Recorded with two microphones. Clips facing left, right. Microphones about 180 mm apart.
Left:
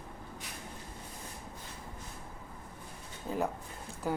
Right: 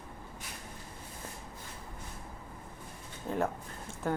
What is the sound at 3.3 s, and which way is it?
Speech, 5° left (ahead or behind).